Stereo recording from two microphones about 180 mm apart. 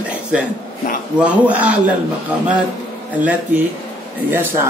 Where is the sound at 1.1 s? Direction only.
10° right (ahead or behind).